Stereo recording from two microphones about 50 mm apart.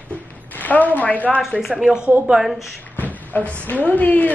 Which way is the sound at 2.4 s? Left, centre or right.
Centre.